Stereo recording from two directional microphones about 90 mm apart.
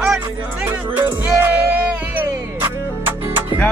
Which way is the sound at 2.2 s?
25° right (ahead or behind).